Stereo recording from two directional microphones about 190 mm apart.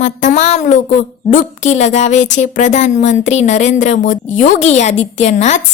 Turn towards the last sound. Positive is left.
turn(degrees=40)  # may be behind; listen again after turning